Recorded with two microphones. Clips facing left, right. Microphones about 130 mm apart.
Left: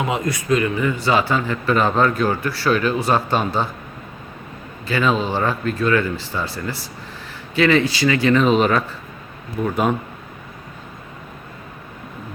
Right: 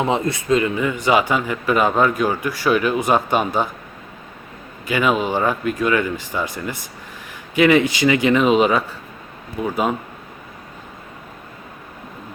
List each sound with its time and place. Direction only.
0.0 s speech: 30° right (ahead or behind); by 3.7 s 15° right (ahead or behind)
4.9 s speech: 15° right (ahead or behind)